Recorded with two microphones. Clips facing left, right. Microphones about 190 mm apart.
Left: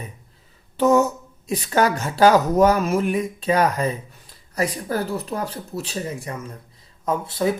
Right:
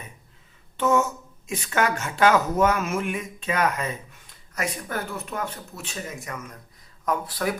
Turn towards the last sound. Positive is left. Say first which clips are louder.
# left 4 dB
turn(degrees=25)  # may be behind; listen again after turning